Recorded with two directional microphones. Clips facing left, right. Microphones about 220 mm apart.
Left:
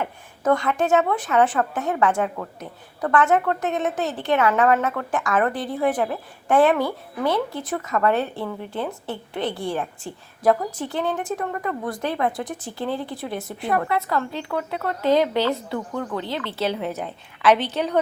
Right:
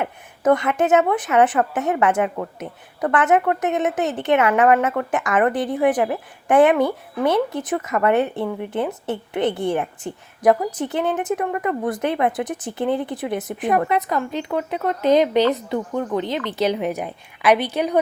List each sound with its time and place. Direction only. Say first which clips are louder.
0.0 s a woman's voice: right 4 dB; 20° right (ahead or behind)